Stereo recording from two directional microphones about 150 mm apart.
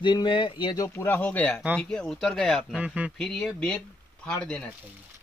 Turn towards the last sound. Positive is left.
turn(degrees=10)  # may be behind; listen again after turning